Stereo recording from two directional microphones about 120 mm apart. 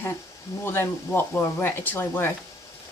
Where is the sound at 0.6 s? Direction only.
20° left (ahead or behind).